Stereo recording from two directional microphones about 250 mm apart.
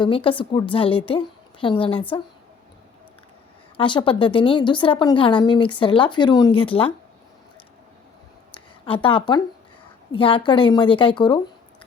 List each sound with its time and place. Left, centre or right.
0.0 s a woman's voice: left
3.8 s a woman's voice: centre
8.5 s a woman's voice: centre